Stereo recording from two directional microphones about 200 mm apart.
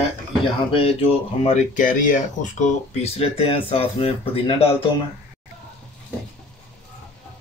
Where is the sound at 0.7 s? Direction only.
30° left (ahead or behind).